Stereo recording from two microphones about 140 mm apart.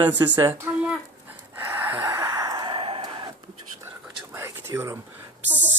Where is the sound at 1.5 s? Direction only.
15° right (ahead or behind); by 3.1 s 40° right (ahead or behind).